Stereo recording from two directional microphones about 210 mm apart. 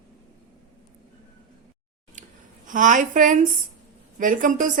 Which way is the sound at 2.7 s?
40° right (ahead or behind).